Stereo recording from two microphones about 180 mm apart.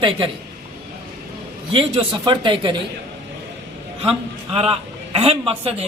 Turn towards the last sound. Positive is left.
turn(degrees=-35)  # may be behind; listen again after turning